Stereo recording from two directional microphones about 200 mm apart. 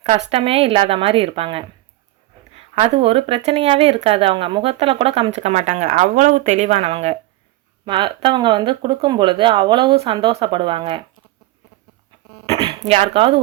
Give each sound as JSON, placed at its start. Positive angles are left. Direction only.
{"t": 0.3, "sound": "speech", "side_deg": -30}
{"t": 2.7, "sound": "speech", "side_deg": -30}
{"t": 12.5, "sound": "speech", "side_deg": -30}